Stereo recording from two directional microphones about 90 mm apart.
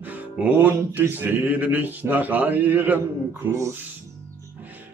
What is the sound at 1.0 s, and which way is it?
Music, 25° right (ahead or behind).